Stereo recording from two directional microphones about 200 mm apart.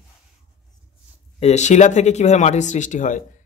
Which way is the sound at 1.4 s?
35° left (ahead or behind).